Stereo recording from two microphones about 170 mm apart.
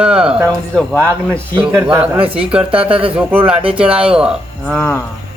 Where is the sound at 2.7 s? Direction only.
30° right (ahead or behind).